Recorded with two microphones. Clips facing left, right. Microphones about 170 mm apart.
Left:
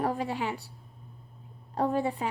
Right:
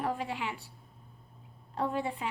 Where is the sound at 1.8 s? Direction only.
40° left (ahead or behind).